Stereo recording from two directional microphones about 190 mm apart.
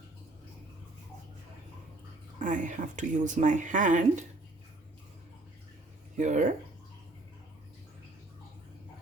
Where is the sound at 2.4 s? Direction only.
40° right (ahead or behind).